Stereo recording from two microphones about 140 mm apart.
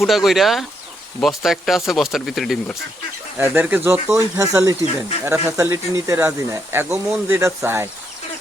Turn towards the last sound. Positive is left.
turn(degrees=-20)  # may be behind; listen again after turning